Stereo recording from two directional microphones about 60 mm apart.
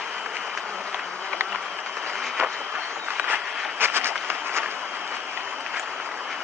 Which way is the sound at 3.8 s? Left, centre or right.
Right.